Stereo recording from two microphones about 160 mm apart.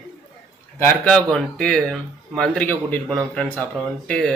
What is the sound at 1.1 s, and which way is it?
Speech, 5° left (ahead or behind).